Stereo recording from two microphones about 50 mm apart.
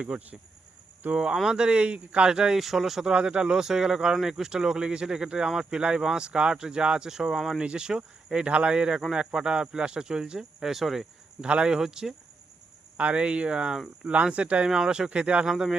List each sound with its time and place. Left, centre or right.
0.1 s speech: centre
2.6 s speech: centre
3.1 s speech: centre
7.6 s speech: centre
11.3 s speech: right
13.0 s speech: right
14.7 s speech: centre
15.4 s speech: centre